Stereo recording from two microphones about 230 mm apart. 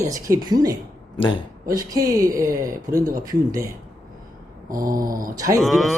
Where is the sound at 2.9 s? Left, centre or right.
Centre.